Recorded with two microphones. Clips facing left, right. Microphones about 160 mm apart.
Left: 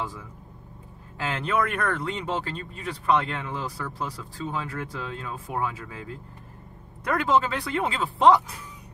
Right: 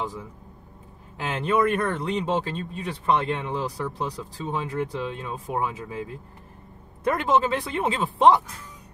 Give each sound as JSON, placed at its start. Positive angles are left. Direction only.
{"t": 1.1, "sound": "speech", "side_deg": -20}
{"t": 7.1, "sound": "speech", "side_deg": -20}